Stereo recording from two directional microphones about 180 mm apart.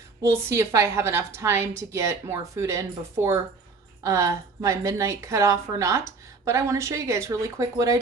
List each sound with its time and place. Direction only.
0.2 s a woman's voice: 15° right (ahead or behind)